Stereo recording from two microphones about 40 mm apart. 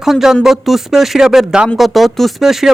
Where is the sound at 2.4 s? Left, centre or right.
Centre.